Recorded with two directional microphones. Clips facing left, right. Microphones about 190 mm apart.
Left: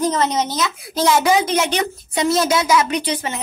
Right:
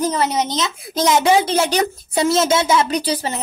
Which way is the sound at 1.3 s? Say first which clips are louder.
Right 2 dB; 30° right (ahead or behind).